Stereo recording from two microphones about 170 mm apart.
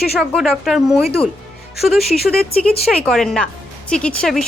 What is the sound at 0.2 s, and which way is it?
Speech, centre (ahead or behind).